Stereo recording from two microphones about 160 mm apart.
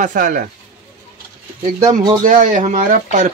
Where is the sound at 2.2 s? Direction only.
55° right (ahead or behind).